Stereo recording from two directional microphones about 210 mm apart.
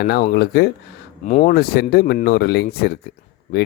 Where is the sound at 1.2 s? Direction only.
35° left (ahead or behind).